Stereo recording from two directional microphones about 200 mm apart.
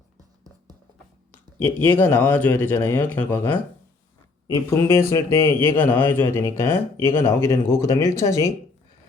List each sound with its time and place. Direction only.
1.5 s a man's voice: 10° left (ahead or behind)